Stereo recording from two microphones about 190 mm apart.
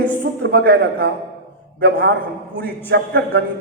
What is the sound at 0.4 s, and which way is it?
A woman's voice, 55° right (ahead or behind).